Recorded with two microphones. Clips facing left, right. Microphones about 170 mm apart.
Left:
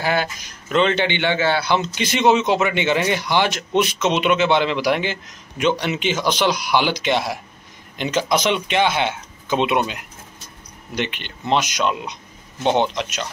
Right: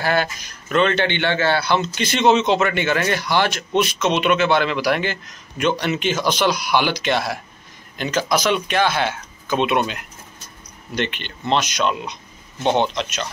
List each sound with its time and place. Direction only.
0.0 s a man's voice: 15° left (ahead or behind)
11.0 s a man's voice: 10° left (ahead or behind)